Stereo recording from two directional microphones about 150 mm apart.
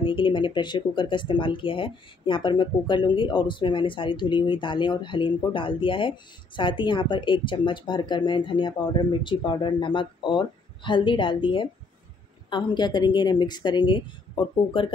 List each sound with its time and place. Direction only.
0.0 s a woman's voice: 35° left (ahead or behind)